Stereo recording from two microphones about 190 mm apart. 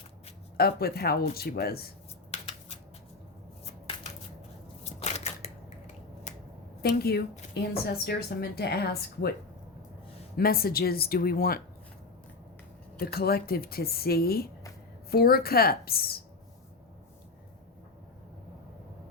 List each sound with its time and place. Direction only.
0.5 s speech: 55° left (ahead or behind)
2.3 s scissors: 35° left (ahead or behind)
4.8 s a sound: 35° left (ahead or behind)
6.3 s finger snapping: 35° left (ahead or behind)
6.8 s a woman's voice: 55° left (ahead or behind)
10.3 s speech: 50° left (ahead or behind)
13.0 s a woman's voice: 55° left (ahead or behind)